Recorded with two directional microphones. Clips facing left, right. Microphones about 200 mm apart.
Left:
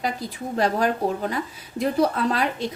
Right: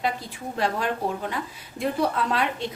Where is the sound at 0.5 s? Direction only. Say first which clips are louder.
Left 4 dB; 40° left (ahead or behind).